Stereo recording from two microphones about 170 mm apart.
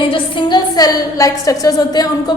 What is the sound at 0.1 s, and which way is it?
A woman's voice, 30° left (ahead or behind).